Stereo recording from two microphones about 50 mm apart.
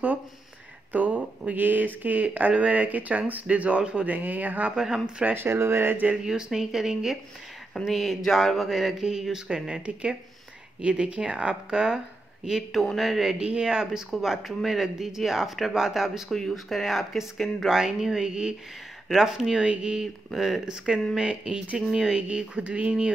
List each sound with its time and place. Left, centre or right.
0.9 s speech: right
4.7 s speech: centre
5.3 s speech: right
6.2 s speech: centre
12.9 s speech: centre
13.4 s speech: centre
16.3 s speech: centre
16.5 s speech: centre
20.2 s speech: centre
20.6 s speech: centre